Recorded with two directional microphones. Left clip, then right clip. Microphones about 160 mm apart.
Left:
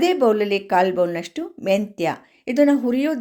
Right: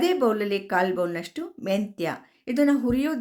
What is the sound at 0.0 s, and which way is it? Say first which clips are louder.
A woman's voice: left 5 dB; 15° left (ahead or behind).